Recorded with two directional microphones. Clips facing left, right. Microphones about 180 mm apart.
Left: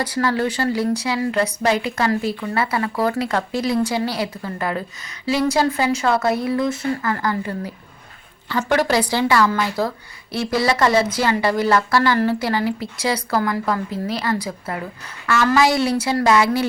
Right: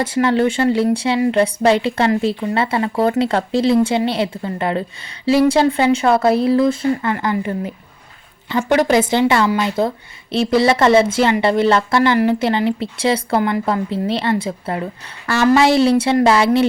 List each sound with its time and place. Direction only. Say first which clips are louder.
0.0 s speech: right 5 dB; 25° right (ahead or behind)